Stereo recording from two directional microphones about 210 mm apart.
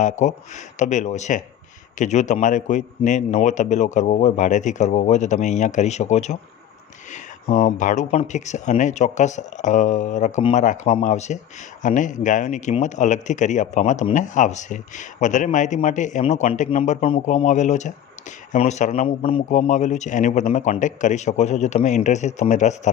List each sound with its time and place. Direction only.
0.0 s speech: 35° left (ahead or behind)